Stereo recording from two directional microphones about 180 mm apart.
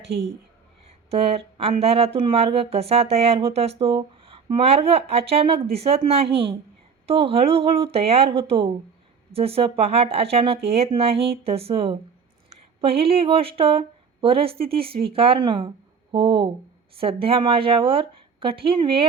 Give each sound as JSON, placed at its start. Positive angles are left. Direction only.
{"t": 1.1, "sound": "speech", "side_deg": -35}
{"t": 7.1, "sound": "speech", "side_deg": -30}